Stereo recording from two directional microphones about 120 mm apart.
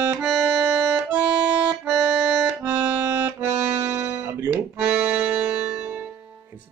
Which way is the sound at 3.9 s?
15° right (ahead or behind).